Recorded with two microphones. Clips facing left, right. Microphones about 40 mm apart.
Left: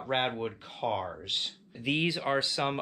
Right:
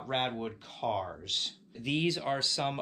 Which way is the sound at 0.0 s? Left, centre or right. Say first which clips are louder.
Left 3 dB; centre.